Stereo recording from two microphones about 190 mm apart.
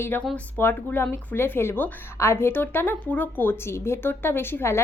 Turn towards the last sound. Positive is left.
turn(degrees=15)  # may be behind; listen again after turning